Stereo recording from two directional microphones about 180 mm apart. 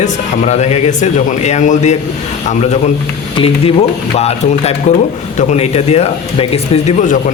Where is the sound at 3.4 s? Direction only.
35° left (ahead or behind).